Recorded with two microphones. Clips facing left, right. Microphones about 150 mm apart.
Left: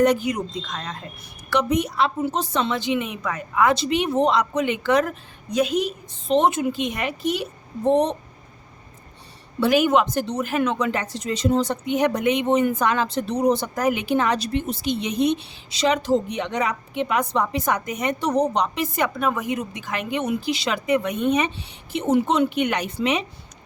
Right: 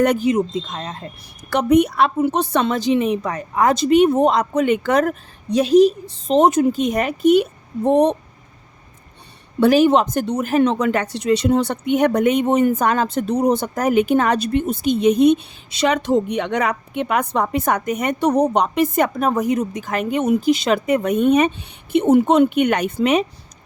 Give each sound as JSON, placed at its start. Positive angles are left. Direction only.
{"t": 0.2, "sound": "speech", "side_deg": -25}
{"t": 1.5, "sound": "a woman's voice", "side_deg": -50}
{"t": 2.7, "sound": "speech", "side_deg": -35}
{"t": 5.5, "sound": "a woman's voice", "side_deg": -30}
{"t": 9.7, "sound": "a woman's voice", "side_deg": -35}
{"t": 10.1, "sound": "speech", "side_deg": -50}
{"t": 10.5, "sound": "a woman's voice", "side_deg": -30}
{"t": 10.8, "sound": "speech", "side_deg": -55}